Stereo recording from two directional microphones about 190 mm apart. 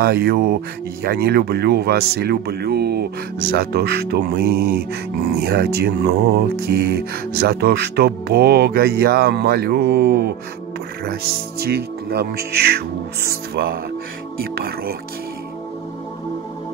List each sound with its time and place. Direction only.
0.0 s speech: 55° right (ahead or behind)
11.6 s speech: 55° right (ahead or behind)